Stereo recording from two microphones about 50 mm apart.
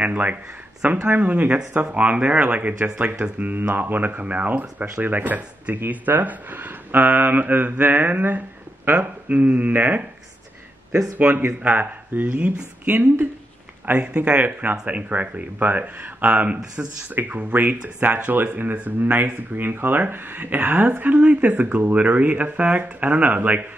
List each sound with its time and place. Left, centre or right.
0.0 s speech: right
11.1 s speech: right
14.4 s speech: right
17.1 s speech: right